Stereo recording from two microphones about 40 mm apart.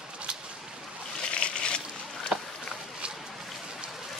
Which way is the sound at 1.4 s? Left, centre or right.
Left.